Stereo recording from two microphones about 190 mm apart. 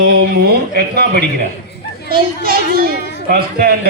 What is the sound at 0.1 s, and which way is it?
A child's voice, 55° right (ahead or behind).